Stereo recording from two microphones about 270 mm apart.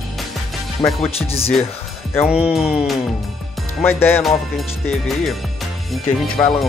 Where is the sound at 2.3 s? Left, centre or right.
Centre.